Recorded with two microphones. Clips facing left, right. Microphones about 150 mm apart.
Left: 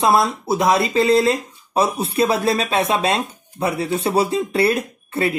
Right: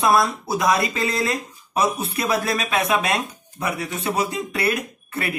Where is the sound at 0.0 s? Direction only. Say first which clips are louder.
Left 2 dB; 25° left (ahead or behind).